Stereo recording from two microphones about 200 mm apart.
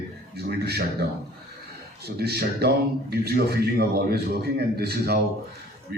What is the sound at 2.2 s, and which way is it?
A man's voice, 50° right (ahead or behind).